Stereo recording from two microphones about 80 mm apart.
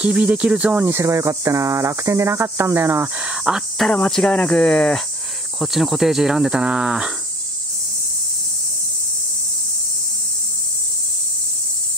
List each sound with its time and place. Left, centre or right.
0.0 s speech: centre
0.8 s speech: right
3.2 s speech: centre
3.7 s speech: centre
5.6 s speech: centre